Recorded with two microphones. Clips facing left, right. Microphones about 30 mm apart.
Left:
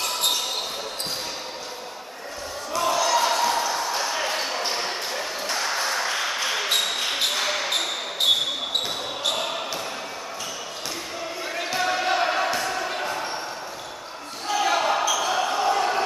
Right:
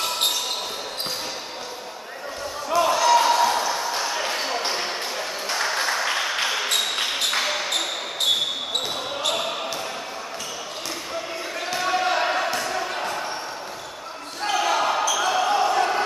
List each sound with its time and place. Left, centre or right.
2.7 s slam: centre
3.3 s basketball bounce: centre
5.6 s applause: centre
6.5 s basketball bounce: centre
11.5 s basketball bounce: centre
14.6 s basketball bounce: centre